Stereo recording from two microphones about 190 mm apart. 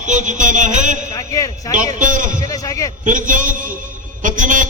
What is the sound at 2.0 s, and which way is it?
Speech, 45° right (ahead or behind).